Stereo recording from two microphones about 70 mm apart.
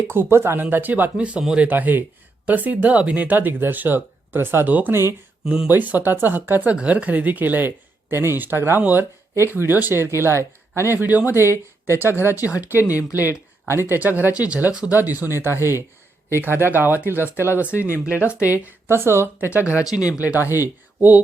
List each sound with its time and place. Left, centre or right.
0.1 s speech: right
1.1 s speech: centre
9.3 s speech: right
10.9 s speech: right
12.5 s speech: right
12.8 s speech: left
13.7 s speech: right; by 14.8 s centre
14.8 s speech: right
17.7 s speech: left
18.9 s speech: right
19.8 s speech: left
20.2 s speech: right